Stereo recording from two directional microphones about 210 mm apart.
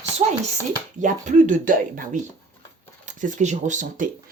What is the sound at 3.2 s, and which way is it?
Speech, 35° right (ahead or behind).